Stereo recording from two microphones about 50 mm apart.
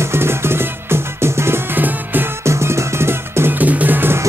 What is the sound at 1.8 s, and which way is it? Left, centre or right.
Music, right.